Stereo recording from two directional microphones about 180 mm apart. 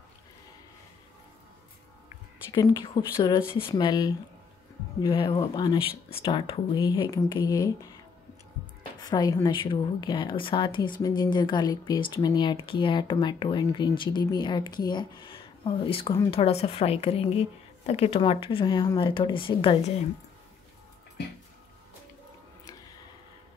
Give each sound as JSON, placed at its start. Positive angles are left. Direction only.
{"t": 2.5, "sound": "speech", "side_deg": 20}
{"t": 9.0, "sound": "a woman's voice", "side_deg": 20}